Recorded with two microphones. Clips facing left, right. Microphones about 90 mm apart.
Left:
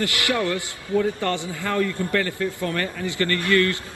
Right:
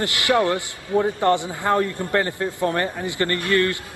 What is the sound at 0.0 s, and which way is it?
A man's voice, 20° right (ahead or behind).